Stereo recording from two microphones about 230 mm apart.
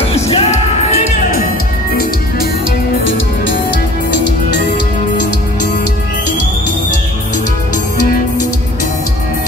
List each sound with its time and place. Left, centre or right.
0.1 s music: left